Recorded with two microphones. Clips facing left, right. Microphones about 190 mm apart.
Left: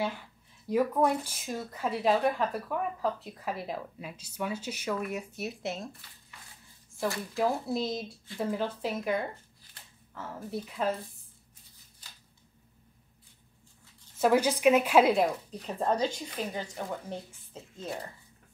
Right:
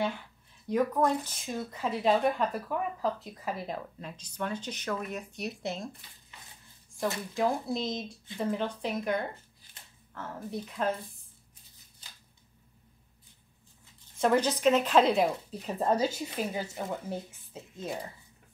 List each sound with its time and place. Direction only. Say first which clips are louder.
0.7 s speech: left 1 dB; 5° left (ahead or behind)
6.3 s dog: even; 20° right (ahead or behind)
7.3 s speech: left 1 dB; 5° left (ahead or behind)
14.1 s a woman's voice: left 1 dB; 5° left (ahead or behind)
15.2 s speech: even; 5° right (ahead or behind)